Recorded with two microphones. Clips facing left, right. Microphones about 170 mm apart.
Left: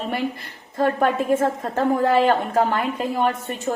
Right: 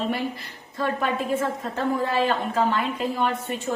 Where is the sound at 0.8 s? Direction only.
50° left (ahead or behind).